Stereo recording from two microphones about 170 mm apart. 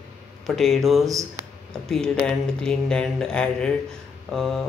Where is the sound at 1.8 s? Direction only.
5° left (ahead or behind).